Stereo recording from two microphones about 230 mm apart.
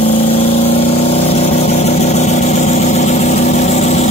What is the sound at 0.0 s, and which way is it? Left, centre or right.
Vehicle, left.